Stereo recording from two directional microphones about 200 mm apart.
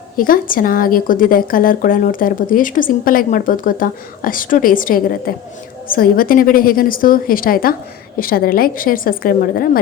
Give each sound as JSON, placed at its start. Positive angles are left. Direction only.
{"t": 0.2, "sound": "speech", "side_deg": 45}